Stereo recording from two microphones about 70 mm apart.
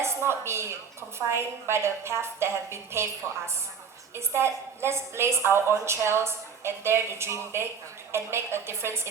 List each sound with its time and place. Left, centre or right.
0.0 s a woman's voice: right